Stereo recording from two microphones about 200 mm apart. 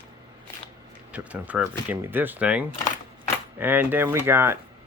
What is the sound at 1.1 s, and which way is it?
Speech, 5° right (ahead or behind).